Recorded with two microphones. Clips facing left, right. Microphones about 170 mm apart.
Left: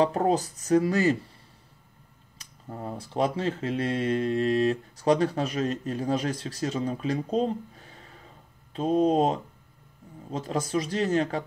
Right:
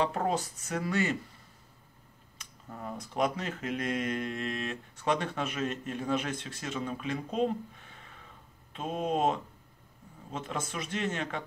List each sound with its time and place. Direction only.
0.0 s speech: 35° left (ahead or behind)
2.3 s speech: 35° left (ahead or behind)